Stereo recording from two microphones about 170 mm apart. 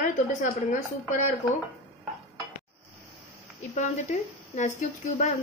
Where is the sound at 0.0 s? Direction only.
50° left (ahead or behind).